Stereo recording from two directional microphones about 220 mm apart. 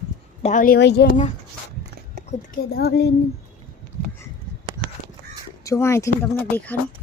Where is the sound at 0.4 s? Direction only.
35° left (ahead or behind).